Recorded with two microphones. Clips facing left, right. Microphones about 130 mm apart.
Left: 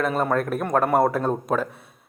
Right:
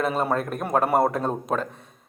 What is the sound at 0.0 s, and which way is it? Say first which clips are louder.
A man's voice: left 1 dB; centre (ahead or behind).